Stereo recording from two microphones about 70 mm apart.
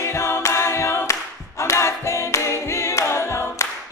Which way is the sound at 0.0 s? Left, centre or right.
Left.